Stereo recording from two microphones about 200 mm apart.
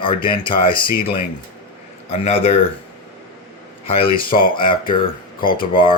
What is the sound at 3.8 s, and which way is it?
Speech, 25° left (ahead or behind).